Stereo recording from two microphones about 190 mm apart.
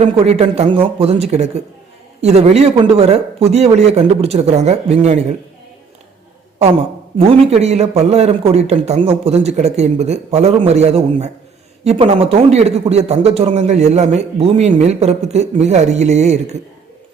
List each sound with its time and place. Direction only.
0.0 s a man's voice: 35° right (ahead or behind)
7.2 s a man's voice: 30° right (ahead or behind)